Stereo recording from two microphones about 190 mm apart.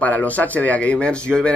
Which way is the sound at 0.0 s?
10° left (ahead or behind).